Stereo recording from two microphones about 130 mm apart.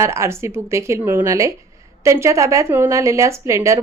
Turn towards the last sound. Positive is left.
turn(degrees=-20)  # may be behind; listen again after turning